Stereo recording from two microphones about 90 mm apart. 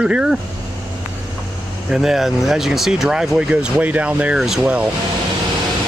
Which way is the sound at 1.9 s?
5° right (ahead or behind).